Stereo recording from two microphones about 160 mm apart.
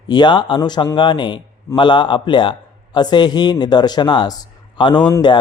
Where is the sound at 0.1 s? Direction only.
30° left (ahead or behind).